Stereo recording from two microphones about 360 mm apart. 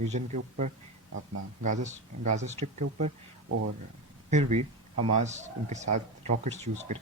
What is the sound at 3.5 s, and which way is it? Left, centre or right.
Speech, right.